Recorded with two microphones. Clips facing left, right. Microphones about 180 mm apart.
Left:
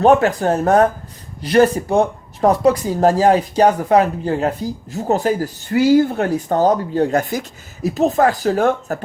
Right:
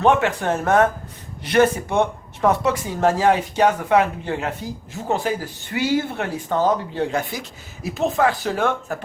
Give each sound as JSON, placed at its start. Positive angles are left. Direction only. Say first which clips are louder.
{"t": 0.0, "sound": "speech", "louder": "left 5 dB", "side_deg": 40}